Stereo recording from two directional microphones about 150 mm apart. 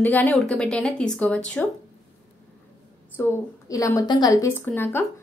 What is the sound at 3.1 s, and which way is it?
A woman's voice, 20° left (ahead or behind).